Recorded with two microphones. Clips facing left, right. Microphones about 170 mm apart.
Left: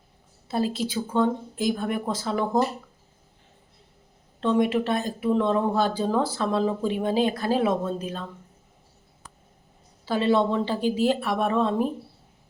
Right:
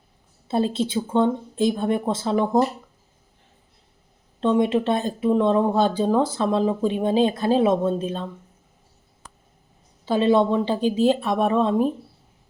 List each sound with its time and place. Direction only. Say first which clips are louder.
0.4 s speech: right 4 dB; 25° right (ahead or behind)
4.4 s speech: right 3 dB; 20° right (ahead or behind)
10.1 s speech: right 4 dB; 20° right (ahead or behind)